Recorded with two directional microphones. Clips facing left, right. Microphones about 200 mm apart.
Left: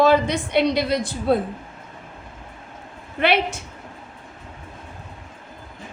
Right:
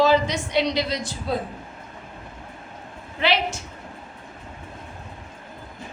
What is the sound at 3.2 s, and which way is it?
Speech, 55° left (ahead or behind).